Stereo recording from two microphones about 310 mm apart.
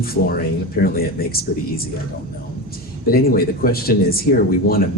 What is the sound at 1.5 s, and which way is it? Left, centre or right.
Speech, left.